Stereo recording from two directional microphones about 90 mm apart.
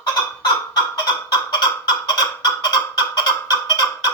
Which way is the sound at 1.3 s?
50° left (ahead or behind).